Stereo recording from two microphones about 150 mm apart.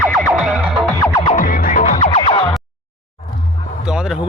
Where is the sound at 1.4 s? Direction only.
65° left (ahead or behind).